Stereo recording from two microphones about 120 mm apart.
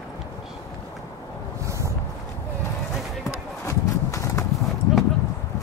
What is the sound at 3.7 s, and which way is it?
Horse, 25° left (ahead or behind).